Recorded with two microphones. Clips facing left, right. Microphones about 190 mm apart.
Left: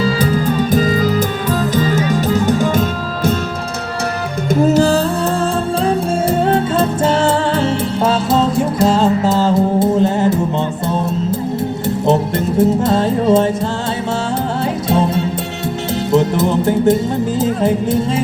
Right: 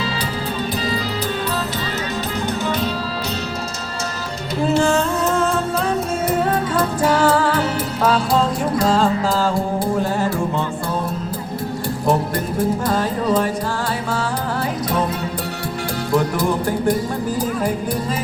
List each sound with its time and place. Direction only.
0.7 s music: 45° left (ahead or behind)
4.4 s music: 45° left (ahead or behind); by 10.4 s 20° left (ahead or behind)
12.0 s music: 25° left (ahead or behind)
14.8 s music: 25° left (ahead or behind)
17.4 s speech: 25° left (ahead or behind)